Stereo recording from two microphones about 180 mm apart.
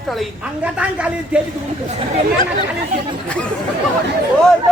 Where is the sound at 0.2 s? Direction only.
5° right (ahead or behind).